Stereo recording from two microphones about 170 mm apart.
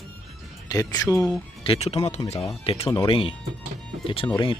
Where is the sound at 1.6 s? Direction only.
35° left (ahead or behind).